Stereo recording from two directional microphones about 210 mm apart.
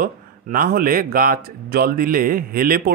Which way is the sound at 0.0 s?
45° right (ahead or behind).